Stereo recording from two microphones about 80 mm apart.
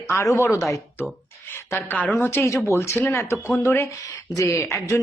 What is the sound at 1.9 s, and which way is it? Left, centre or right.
Speech, left.